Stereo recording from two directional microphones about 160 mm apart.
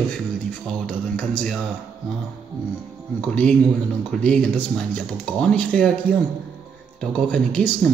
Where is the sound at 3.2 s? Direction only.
5° left (ahead or behind).